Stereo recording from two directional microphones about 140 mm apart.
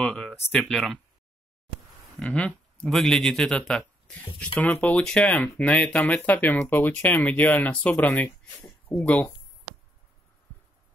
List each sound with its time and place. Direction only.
0.0 s speech: 5° left (ahead or behind)
2.1 s speech: 5° left (ahead or behind)